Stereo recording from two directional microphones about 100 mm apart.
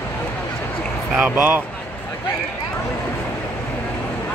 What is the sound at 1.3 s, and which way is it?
Speech, 15° right (ahead or behind).